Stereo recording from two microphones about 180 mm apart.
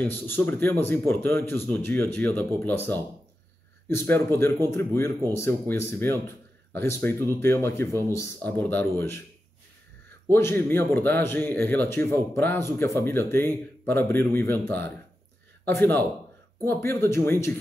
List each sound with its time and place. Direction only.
0.0 s speech: 10° left (ahead or behind)
10.3 s speech: 10° left (ahead or behind)
15.6 s a man's voice: 10° left (ahead or behind)